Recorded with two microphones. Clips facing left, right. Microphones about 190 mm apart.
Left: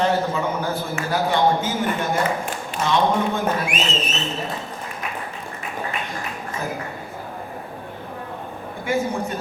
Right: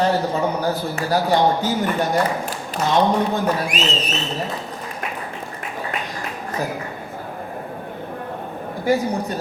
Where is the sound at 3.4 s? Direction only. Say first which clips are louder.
Right 2 dB; 35° right (ahead or behind).